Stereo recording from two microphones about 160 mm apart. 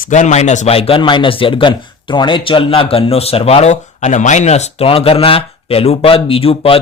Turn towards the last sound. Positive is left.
turn(degrees=35)  # may be behind; listen again after turning